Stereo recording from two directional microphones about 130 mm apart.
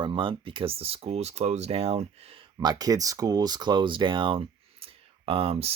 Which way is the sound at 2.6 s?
30° right (ahead or behind).